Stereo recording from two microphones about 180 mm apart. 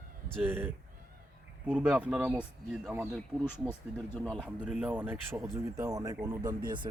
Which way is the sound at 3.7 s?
5° left (ahead or behind).